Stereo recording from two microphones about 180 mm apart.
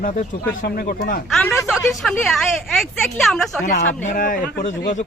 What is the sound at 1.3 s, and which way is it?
Speech, 5° left (ahead or behind).